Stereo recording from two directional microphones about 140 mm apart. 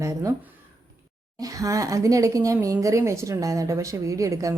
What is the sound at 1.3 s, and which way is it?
A woman's voice, 25° right (ahead or behind).